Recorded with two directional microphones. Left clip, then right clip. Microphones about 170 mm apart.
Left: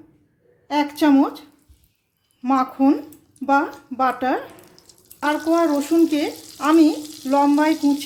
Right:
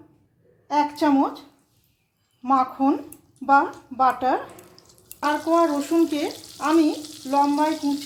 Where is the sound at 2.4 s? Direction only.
35° left (ahead or behind).